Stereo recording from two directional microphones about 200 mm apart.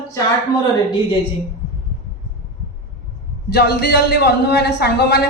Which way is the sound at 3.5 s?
55° left (ahead or behind).